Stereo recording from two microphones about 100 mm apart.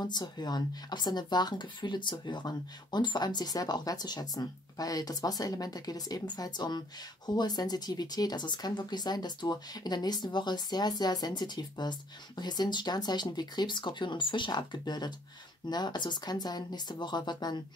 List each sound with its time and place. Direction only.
0.0 s speech: 45° left (ahead or behind)